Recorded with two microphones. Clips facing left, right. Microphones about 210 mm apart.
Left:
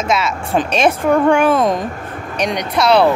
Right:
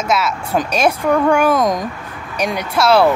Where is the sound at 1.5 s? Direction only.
30° left (ahead or behind).